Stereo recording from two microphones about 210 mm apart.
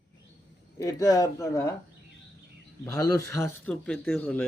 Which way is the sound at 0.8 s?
15° left (ahead or behind).